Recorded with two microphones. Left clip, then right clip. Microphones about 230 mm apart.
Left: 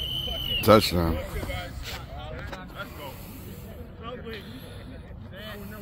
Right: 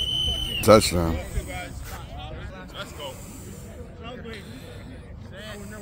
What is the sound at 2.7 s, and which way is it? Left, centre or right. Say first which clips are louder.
Spray: right 3 dB; right.